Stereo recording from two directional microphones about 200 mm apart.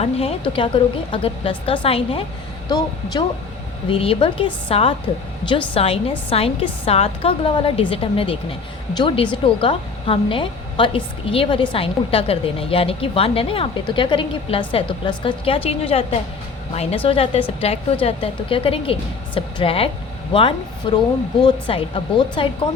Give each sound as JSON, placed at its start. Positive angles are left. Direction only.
{"t": 0.0, "sound": "a woman's voice", "side_deg": 30}